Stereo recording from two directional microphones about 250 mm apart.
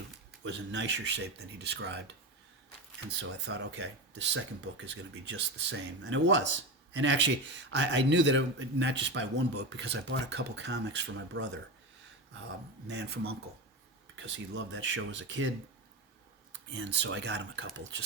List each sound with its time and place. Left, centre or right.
0.4 s speech: right
12.9 s speech: right